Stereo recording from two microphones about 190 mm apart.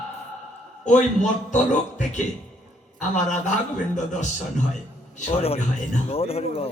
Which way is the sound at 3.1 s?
40° left (ahead or behind).